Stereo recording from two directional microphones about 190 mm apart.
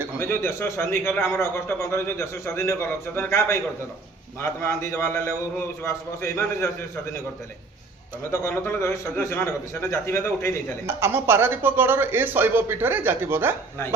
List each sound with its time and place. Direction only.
0.2 s a man's voice: 10° left (ahead or behind)
8.3 s a man's voice: 15° left (ahead or behind)
10.8 s speech: 10° right (ahead or behind)